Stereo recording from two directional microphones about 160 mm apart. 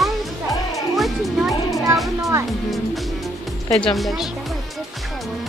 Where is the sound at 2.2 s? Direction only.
20° right (ahead or behind).